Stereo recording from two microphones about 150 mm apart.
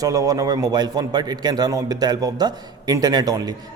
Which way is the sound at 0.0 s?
25° right (ahead or behind).